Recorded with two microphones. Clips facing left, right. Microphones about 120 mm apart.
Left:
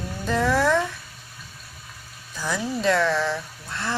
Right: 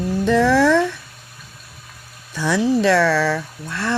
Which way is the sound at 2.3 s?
75° right (ahead or behind).